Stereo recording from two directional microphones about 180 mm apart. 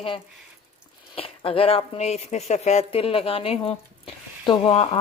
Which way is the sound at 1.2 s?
30° left (ahead or behind).